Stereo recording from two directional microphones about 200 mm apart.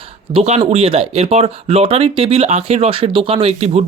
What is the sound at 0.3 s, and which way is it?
Speech, 30° right (ahead or behind).